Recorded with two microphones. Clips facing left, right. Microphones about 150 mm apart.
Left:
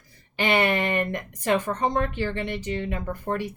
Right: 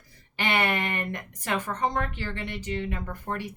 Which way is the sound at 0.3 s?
20° left (ahead or behind).